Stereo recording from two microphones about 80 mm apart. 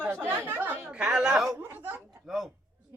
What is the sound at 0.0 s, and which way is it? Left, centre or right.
Chatter, right.